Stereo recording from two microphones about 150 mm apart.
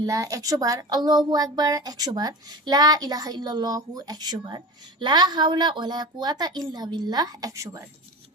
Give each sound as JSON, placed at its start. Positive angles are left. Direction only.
{"t": 0.0, "sound": "speech", "side_deg": -20}